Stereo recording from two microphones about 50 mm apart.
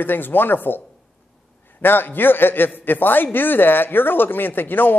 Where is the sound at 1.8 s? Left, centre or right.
Left.